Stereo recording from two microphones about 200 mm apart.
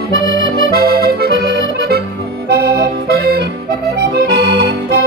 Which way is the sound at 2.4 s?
55° right (ahead or behind).